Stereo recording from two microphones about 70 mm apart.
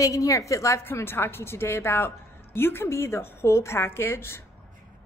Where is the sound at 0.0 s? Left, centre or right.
Left.